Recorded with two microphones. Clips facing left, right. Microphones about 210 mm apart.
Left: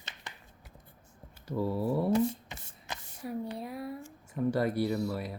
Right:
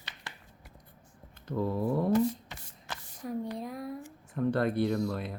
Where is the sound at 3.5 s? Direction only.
5° left (ahead or behind).